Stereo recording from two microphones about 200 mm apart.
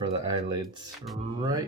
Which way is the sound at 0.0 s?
25° right (ahead or behind).